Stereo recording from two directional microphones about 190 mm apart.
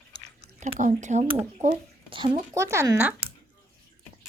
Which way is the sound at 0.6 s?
40° right (ahead or behind).